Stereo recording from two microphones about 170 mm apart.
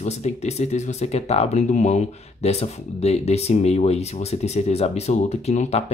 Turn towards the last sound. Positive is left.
turn(degrees=40)  # may be behind; listen again after turning